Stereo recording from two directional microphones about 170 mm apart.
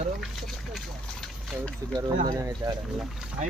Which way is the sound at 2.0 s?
20° right (ahead or behind).